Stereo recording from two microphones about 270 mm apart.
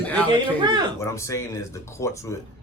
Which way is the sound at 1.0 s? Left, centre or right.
Centre.